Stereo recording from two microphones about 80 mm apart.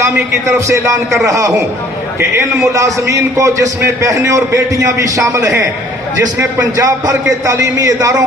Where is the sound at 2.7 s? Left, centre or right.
Right.